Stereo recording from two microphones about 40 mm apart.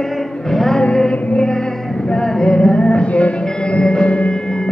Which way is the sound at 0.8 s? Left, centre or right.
Left.